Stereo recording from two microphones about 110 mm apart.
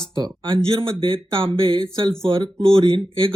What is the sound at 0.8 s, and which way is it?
Speech, 50° right (ahead or behind).